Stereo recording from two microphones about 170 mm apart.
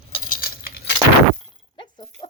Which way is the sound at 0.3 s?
60° left (ahead or behind).